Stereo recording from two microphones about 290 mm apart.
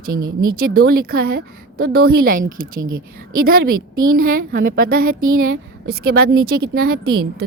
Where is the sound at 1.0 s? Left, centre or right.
Right.